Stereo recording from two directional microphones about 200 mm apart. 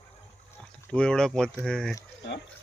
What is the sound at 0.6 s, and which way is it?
Speech, 5° left (ahead or behind).